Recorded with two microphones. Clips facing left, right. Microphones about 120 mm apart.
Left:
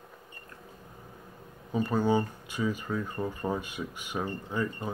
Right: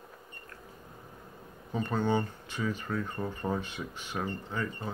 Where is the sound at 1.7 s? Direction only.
10° left (ahead or behind).